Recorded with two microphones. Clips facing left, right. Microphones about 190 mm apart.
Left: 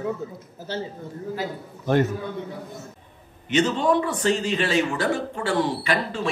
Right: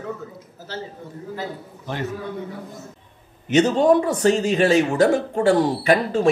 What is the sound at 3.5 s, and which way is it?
A man's voice, 45° right (ahead or behind).